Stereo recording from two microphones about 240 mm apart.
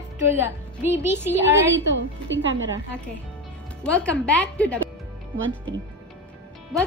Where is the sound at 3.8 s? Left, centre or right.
Centre.